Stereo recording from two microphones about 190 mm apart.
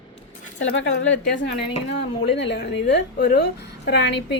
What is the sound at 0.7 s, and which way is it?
A woman's voice, 70° left (ahead or behind).